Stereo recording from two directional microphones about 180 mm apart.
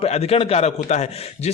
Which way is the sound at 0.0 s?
35° left (ahead or behind).